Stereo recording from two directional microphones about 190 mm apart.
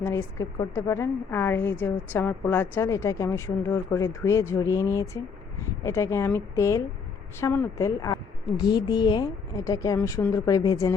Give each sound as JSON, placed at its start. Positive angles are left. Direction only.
{"t": 0.0, "sound": "a woman's voice", "side_deg": 15}